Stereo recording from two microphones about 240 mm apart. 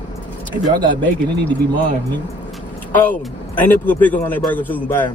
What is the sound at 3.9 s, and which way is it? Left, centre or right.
Music, centre.